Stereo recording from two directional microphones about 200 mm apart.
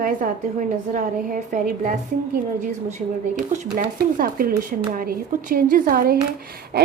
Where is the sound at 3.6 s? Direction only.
45° right (ahead or behind).